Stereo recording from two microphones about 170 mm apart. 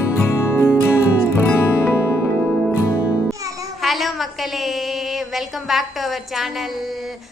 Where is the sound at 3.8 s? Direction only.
Centre (ahead or behind).